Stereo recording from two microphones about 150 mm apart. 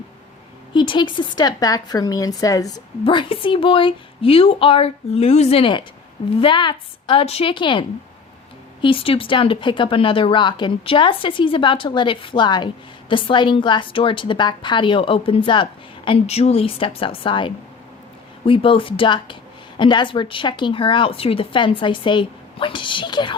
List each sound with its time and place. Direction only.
0.7 s a woman's voice: 30° left (ahead or behind)
3.0 s speech: 35° left (ahead or behind)